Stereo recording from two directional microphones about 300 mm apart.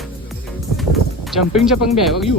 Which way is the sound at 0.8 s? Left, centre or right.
Centre.